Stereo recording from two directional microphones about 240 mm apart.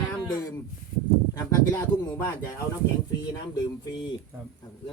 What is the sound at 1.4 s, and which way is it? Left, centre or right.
Speech, centre.